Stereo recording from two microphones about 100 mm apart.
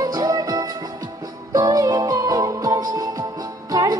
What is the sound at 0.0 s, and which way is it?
Music, 40° right (ahead or behind).